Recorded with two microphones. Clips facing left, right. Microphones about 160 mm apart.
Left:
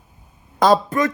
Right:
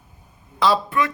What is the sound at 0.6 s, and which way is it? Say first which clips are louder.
Speech: left 4 dB; 40° left (ahead or behind).